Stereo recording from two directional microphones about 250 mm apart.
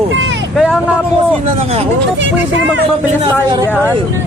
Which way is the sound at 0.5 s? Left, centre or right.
Centre.